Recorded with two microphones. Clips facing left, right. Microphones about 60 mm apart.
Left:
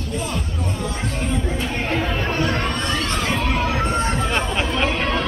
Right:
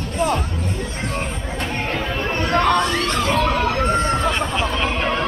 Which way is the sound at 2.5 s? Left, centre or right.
Right.